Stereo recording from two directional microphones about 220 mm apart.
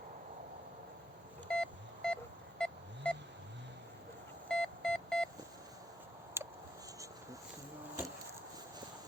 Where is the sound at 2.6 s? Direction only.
5° left (ahead or behind).